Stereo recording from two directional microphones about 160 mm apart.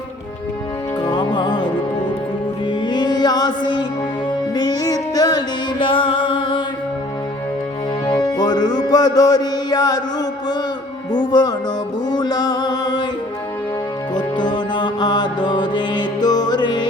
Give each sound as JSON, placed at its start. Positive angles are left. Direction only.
{"t": 1.0, "sound": "music", "side_deg": 30}
{"t": 8.0, "sound": "music", "side_deg": 25}
{"t": 14.2, "sound": "music", "side_deg": 25}